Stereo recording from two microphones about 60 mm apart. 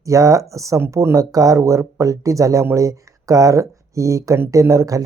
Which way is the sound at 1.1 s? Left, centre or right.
Right.